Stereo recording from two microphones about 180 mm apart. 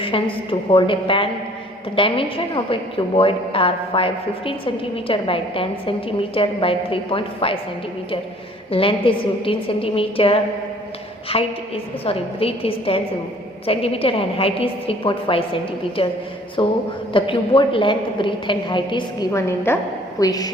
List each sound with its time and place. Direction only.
0.0 s a woman's voice: 30° left (ahead or behind)
8.7 s a woman's voice: 30° left (ahead or behind)